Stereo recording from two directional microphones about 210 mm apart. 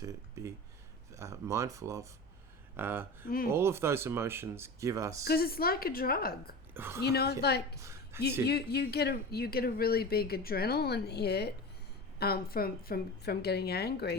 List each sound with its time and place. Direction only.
0.0 s speech: 15° right (ahead or behind)
3.2 s speech: 45° left (ahead or behind)
3.5 s speech: 10° right (ahead or behind)
5.2 s speech: 45° left (ahead or behind)
6.7 s a woman's voice: 10° right (ahead or behind)
7.0 s speech: 50° left (ahead or behind)
7.8 s a sound: 15° right (ahead or behind)
8.4 s speech: 50° left (ahead or behind)